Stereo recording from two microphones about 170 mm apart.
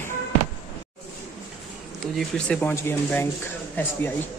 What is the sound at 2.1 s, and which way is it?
Speech, 5° left (ahead or behind).